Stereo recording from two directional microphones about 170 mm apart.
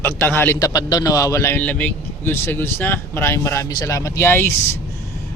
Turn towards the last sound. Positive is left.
turn(degrees=15)  # may be behind; listen again after turning